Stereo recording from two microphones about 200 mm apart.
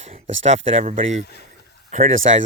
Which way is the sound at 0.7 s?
30° right (ahead or behind).